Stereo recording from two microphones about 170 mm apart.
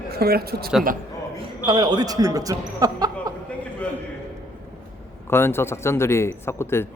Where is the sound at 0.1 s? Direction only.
65° right (ahead or behind).